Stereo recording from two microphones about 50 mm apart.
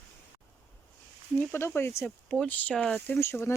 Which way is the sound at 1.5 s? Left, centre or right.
Left.